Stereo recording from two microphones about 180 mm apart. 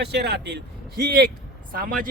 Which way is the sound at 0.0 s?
65° right (ahead or behind).